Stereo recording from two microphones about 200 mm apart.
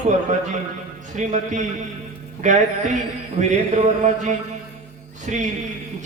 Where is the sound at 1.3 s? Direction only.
35° right (ahead or behind).